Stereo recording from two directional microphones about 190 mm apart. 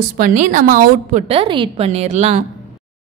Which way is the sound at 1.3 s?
30° right (ahead or behind).